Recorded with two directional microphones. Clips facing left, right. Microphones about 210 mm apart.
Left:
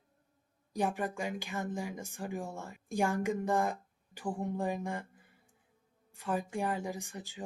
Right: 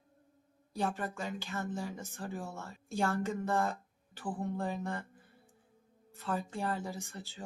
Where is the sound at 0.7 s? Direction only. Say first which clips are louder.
Left 2 dB; 15° left (ahead or behind).